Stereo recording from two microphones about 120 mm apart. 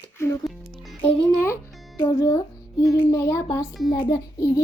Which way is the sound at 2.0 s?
25° left (ahead or behind).